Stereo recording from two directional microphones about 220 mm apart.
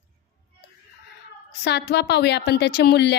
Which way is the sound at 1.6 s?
50° left (ahead or behind).